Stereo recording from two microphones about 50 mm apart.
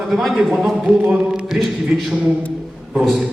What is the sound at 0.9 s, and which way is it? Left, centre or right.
Speech, centre.